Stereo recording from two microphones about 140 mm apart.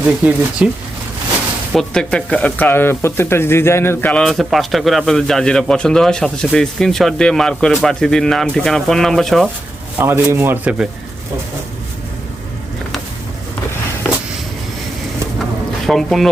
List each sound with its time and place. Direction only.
0.0 s a man's voice: 10° right (ahead or behind)
1.7 s speech: 5° left (ahead or behind)
10.0 s a man's voice: 15° right (ahead or behind)
15.9 s speech: centre (ahead or behind)